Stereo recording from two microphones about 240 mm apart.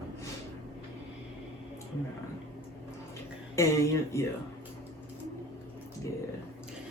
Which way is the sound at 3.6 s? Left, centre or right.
Centre.